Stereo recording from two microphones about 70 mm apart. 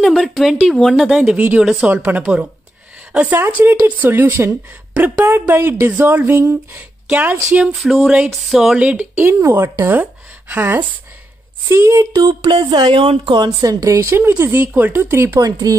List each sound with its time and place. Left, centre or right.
0.0 s speech: centre
1.9 s speech: right
3.3 s speech: right
7.1 s speech: right
7.7 s speech: centre
8.7 s speech: centre
9.2 s speech: right
10.5 s speech: right
12.1 s speech: right
14.4 s speech: right